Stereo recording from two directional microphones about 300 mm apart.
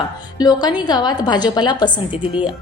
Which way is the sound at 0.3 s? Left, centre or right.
Centre.